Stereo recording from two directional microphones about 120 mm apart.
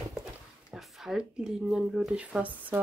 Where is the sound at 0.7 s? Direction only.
Centre (ahead or behind).